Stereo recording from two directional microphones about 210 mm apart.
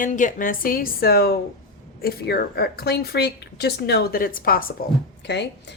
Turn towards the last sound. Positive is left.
turn(degrees=55)  # may be behind; listen again after turning